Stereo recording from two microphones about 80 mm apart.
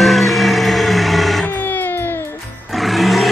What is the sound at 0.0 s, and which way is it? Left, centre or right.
Music, centre.